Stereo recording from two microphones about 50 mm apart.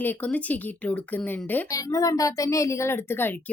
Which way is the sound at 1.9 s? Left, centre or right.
Left.